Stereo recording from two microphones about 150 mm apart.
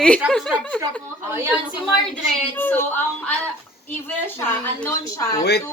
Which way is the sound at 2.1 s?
10° left (ahead or behind).